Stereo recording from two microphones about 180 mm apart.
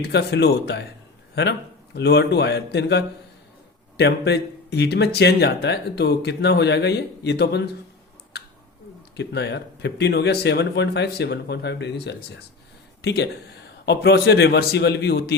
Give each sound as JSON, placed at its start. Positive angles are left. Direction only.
{"t": 0.0, "sound": "speech", "side_deg": 65}
{"t": 9.1, "sound": "speech", "side_deg": 70}